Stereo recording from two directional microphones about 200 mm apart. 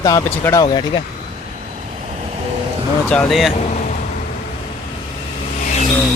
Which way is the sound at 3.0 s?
5° left (ahead or behind).